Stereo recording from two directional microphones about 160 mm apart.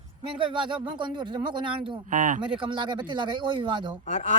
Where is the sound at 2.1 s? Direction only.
55° right (ahead or behind).